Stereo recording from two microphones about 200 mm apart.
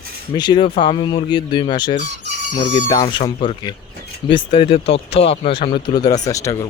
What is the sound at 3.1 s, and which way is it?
Speech, 25° left (ahead or behind).